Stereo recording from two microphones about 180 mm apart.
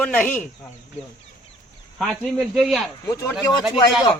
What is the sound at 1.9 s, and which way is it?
Speech, centre (ahead or behind).